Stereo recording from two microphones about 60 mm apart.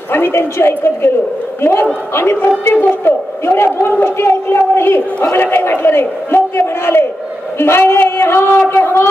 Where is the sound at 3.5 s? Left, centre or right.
Left.